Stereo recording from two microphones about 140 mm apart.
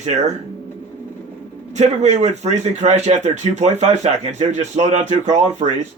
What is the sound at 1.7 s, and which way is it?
A man's voice, 55° right (ahead or behind).